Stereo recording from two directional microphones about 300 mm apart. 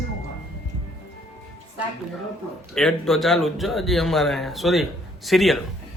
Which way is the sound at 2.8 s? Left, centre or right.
Centre.